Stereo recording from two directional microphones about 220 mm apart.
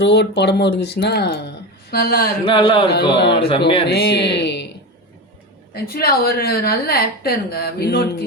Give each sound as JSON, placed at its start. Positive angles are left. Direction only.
{"t": 0.0, "sound": "a woman's voice", "side_deg": 50}
{"t": 2.4, "sound": "a sound", "side_deg": 25}
{"t": 3.8, "sound": "a woman's voice", "side_deg": 45}
{"t": 5.9, "sound": "a woman's voice", "side_deg": 45}